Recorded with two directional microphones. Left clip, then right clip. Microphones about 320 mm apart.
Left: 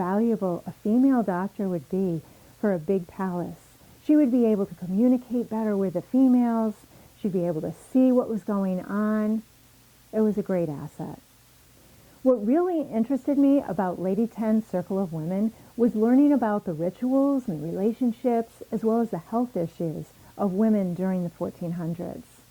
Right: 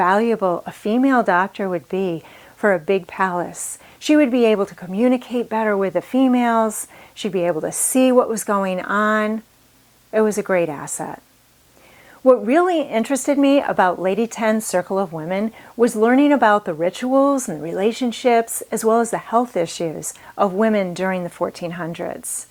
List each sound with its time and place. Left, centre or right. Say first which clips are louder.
0.0 s speech: right 10 dB; centre
12.2 s speech: right 8 dB; centre